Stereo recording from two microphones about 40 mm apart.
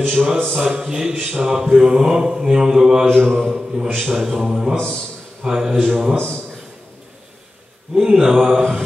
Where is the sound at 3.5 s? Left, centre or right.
Centre.